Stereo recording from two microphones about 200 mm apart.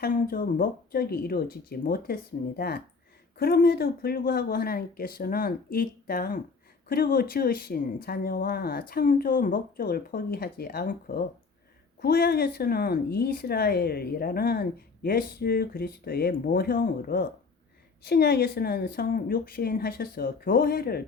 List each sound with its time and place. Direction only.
0.0 s a woman's voice: 45° left (ahead or behind)